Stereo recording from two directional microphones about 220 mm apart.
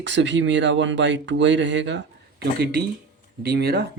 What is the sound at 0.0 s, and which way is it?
Speech, 55° right (ahead or behind).